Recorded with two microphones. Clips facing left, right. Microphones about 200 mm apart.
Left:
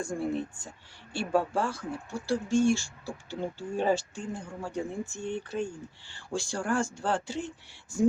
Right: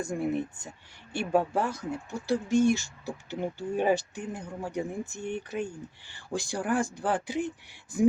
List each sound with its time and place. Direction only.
0.0 s speech: 20° right (ahead or behind)